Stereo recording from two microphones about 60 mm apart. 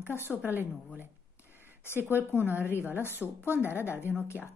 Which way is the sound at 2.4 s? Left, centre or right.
Right.